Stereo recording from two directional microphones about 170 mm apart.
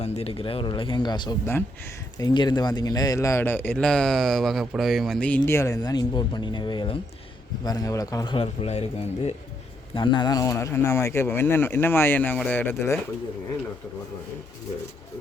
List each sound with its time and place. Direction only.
0.0 s a man's voice: 40° left (ahead or behind); by 5.4 s 5° left (ahead or behind)
5.5 s a man's voice: 15° left (ahead or behind); by 9.3 s 40° left (ahead or behind)
9.9 s a man's voice: 25° left (ahead or behind)